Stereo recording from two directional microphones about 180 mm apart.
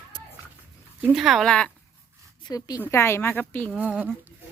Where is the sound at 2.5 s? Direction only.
20° left (ahead or behind).